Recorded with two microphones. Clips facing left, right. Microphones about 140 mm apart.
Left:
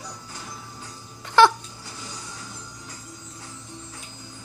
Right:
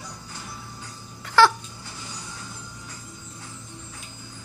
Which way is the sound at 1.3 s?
20° left (ahead or behind).